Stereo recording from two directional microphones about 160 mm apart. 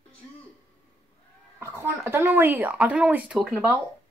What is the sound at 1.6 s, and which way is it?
Speech, 15° right (ahead or behind).